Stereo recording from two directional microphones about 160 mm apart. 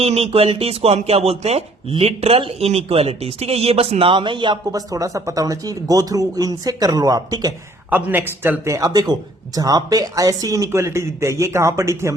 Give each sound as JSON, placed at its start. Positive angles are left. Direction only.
{"t": 0.0, "sound": "speech", "side_deg": -40}
{"t": 7.9, "sound": "a man's voice", "side_deg": -10}